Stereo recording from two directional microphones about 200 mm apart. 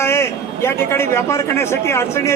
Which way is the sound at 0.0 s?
10° left (ahead or behind).